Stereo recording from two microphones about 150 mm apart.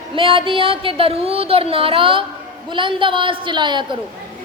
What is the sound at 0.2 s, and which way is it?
A woman's voice, 35° right (ahead or behind).